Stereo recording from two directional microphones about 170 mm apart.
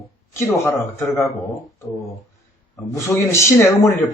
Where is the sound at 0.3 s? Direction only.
15° left (ahead or behind).